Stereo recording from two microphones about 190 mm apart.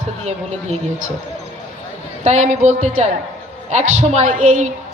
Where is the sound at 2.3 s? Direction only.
40° right (ahead or behind).